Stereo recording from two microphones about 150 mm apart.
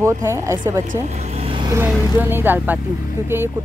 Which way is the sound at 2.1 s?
15° right (ahead or behind).